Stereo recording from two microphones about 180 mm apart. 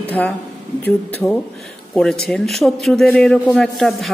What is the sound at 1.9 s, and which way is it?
A man's voice, centre (ahead or behind).